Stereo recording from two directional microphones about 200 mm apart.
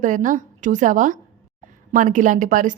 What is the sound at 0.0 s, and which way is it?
A woman's voice, 40° right (ahead or behind).